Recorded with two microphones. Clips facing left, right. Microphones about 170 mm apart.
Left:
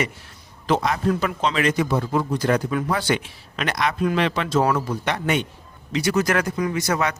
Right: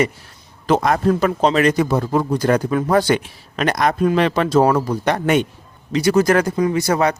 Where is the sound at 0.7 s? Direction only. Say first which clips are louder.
Right 5 dB; 50° right (ahead or behind).